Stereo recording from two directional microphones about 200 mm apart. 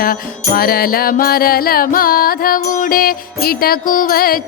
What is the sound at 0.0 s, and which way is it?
Music, 45° left (ahead or behind).